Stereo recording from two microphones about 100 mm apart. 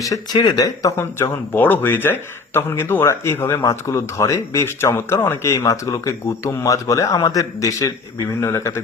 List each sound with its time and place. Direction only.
0.3 s a man's voice: 40° left (ahead or behind)